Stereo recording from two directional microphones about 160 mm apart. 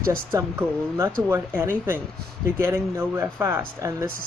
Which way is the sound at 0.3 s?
20° right (ahead or behind).